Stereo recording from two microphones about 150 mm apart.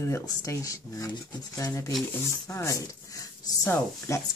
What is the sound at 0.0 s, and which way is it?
Speech, 20° left (ahead or behind).